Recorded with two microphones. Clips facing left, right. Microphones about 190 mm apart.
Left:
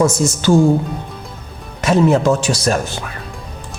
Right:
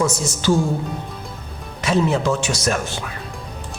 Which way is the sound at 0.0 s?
50° left (ahead or behind).